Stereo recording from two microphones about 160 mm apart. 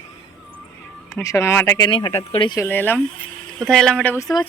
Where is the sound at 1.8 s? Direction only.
30° left (ahead or behind).